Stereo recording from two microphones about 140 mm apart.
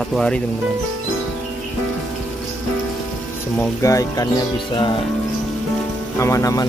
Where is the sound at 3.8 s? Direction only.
25° left (ahead or behind).